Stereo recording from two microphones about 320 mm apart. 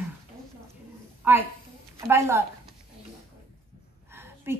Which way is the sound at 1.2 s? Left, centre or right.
Centre.